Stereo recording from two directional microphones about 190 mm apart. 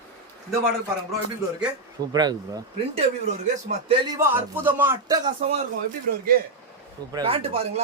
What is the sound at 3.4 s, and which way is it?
Speech, 35° right (ahead or behind).